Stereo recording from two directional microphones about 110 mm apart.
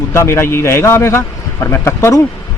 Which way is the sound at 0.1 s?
25° left (ahead or behind).